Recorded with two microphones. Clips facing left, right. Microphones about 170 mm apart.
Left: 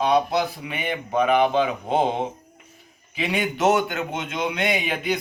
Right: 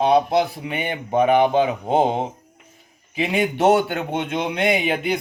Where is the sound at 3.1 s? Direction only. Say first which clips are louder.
Right 4 dB; 25° right (ahead or behind).